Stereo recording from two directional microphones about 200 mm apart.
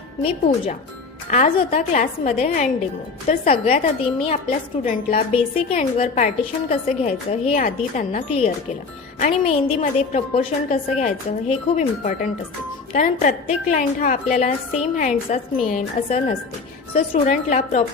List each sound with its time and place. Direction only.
0.2 s a woman's voice: 30° left (ahead or behind)